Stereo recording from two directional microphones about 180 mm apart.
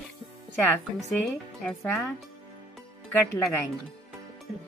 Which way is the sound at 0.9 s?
5° left (ahead or behind).